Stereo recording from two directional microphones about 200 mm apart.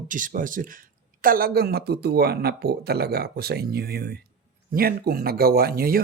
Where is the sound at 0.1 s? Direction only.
40° right (ahead or behind).